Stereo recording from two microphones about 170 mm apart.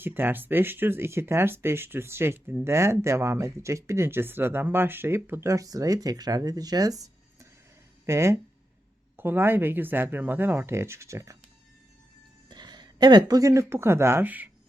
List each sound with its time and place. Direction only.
0.0 s speech: 10° right (ahead or behind)
12.5 s speech: 25° right (ahead or behind); by 14.5 s 10° right (ahead or behind)